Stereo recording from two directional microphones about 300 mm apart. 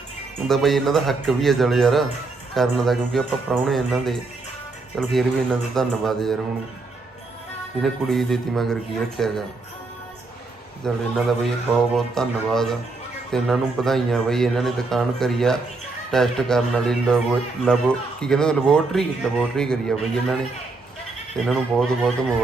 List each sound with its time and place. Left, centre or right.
0.4 s speech: centre
7.8 s speech: centre
10.8 s speech: centre
21.3 s speech: centre